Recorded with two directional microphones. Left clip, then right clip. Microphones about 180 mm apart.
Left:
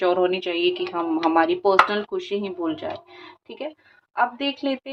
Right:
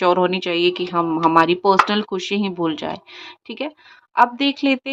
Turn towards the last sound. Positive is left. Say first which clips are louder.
# right 6 dB
turn(degrees=-55)  # may be behind; listen again after turning